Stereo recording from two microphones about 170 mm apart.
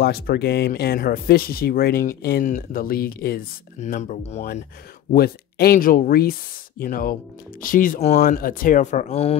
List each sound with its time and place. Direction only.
0.0 s speech: 65° left (ahead or behind)
3.8 s speech: 45° left (ahead or behind)
5.1 s speech: 65° left (ahead or behind); by 9.4 s 35° left (ahead or behind)